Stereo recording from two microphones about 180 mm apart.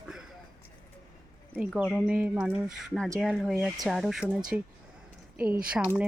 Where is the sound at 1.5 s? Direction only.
Centre (ahead or behind).